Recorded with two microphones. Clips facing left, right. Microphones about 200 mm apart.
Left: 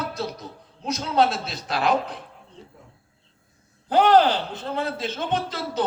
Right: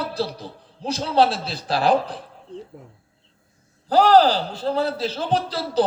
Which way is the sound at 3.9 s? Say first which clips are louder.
Right 2 dB; 35° right (ahead or behind).